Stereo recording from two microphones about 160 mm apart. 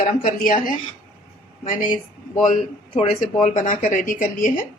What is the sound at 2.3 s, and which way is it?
A woman's voice, 45° left (ahead or behind).